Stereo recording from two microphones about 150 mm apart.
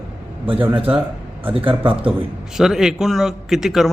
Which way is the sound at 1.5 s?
35° right (ahead or behind).